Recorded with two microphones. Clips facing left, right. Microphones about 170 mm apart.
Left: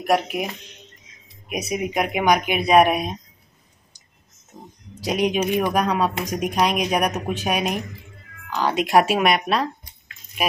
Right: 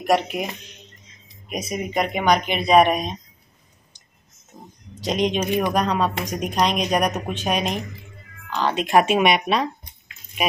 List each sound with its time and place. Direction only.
0.0 s speech: 5° left (ahead or behind)
1.5 s speech: 10° left (ahead or behind)
5.0 s speech: 5° left (ahead or behind)